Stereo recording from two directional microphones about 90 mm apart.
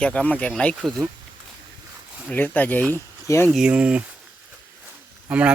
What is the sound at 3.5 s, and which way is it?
Speech, 10° right (ahead or behind).